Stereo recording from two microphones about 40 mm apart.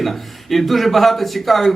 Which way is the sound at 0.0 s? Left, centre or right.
Centre.